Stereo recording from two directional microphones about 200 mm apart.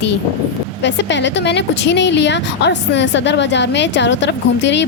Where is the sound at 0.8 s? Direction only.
60° left (ahead or behind).